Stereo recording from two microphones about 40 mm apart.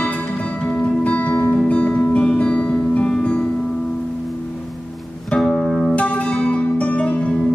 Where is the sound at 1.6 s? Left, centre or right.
Left.